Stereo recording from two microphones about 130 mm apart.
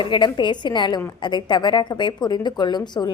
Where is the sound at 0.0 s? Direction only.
35° left (ahead or behind).